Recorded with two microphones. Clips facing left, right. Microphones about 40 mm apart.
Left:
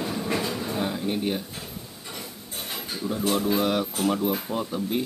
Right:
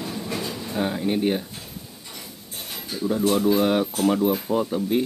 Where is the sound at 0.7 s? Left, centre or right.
Centre.